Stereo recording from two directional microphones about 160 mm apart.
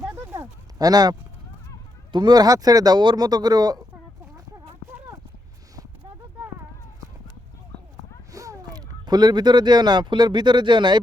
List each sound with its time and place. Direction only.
0.0 s a sound: 10° right (ahead or behind)
2.1 s speech: 25° right (ahead or behind)
8.3 s speech: 20° right (ahead or behind)